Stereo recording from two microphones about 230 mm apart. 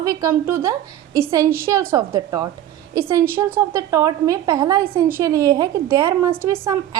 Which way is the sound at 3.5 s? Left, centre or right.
Centre.